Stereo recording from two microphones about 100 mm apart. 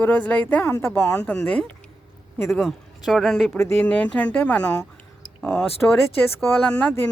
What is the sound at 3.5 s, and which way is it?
Speech, 25° left (ahead or behind).